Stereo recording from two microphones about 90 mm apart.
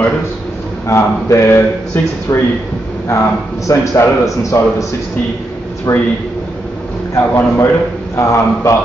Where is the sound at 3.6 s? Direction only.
35° left (ahead or behind).